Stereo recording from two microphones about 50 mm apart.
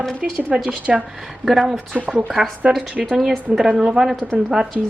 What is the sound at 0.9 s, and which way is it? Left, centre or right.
A woman's voice, centre.